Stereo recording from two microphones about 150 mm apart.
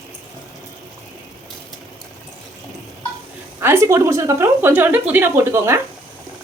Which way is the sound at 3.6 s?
15° right (ahead or behind).